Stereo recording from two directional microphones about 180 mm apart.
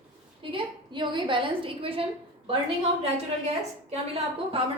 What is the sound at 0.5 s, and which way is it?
A woman's voice, 25° right (ahead or behind).